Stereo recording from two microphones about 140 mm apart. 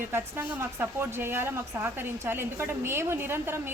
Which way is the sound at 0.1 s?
15° right (ahead or behind).